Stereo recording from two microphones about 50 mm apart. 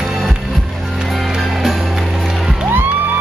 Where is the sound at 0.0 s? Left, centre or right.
Centre.